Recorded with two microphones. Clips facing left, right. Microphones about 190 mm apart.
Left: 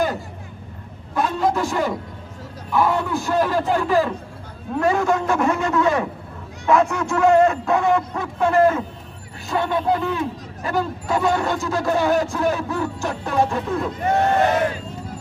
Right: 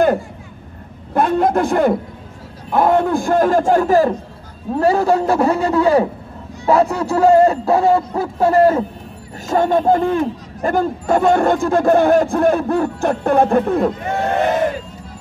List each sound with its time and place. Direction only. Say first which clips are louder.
1.1 s a sound: right 6 dB; 55° right (ahead or behind)
2.7 s a man's voice: right 6 dB; 55° right (ahead or behind); by 8.8 s 35° right (ahead or behind)
9.5 s a man's voice: right 6 dB; 45° right (ahead or behind)